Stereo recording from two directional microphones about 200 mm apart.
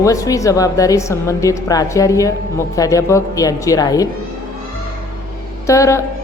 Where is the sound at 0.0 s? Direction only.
15° left (ahead or behind).